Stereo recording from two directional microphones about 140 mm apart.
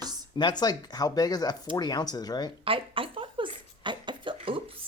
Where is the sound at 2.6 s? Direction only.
40° right (ahead or behind).